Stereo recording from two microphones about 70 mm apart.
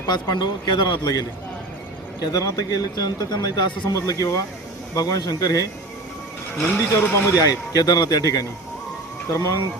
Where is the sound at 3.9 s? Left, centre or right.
Left.